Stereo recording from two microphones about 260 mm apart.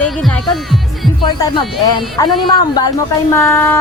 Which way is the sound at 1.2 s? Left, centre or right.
Centre.